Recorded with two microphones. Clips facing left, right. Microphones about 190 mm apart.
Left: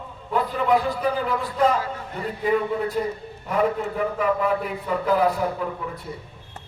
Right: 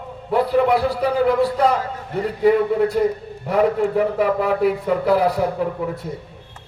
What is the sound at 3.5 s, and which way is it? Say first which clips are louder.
A man's voice: right 5 dB; 75° right (ahead or behind).